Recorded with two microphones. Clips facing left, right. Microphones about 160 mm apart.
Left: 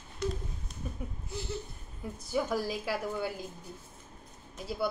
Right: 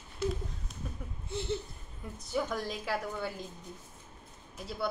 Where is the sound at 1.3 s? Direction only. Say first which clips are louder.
Right 6 dB; 25° right (ahead or behind).